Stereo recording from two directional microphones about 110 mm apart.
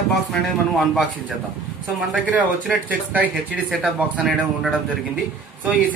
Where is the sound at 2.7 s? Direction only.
15° right (ahead or behind).